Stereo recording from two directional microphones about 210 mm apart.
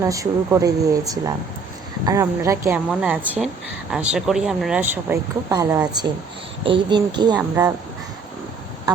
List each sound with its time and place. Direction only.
0.0 s a woman's voice: 15° right (ahead or behind)